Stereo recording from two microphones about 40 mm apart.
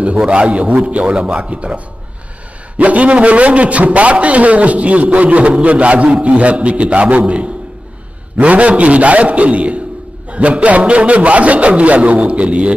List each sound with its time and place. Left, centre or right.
0.3 s a man's voice: right
2.8 s a man's voice: right